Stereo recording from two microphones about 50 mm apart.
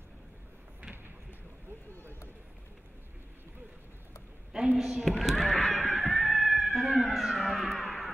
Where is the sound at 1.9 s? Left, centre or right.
Left.